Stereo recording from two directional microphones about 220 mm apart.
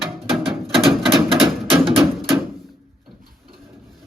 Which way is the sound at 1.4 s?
25° right (ahead or behind).